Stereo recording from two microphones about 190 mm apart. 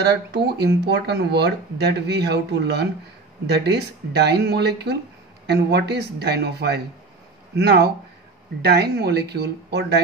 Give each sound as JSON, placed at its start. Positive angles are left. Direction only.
{"t": 0.0, "sound": "speech", "side_deg": -60}